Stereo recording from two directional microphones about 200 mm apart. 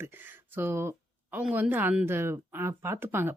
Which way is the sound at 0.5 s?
10° right (ahead or behind).